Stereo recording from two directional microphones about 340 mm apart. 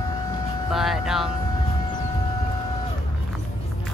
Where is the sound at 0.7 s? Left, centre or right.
Centre.